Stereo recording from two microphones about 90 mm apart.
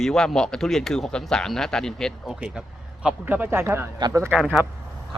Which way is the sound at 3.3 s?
25° right (ahead or behind).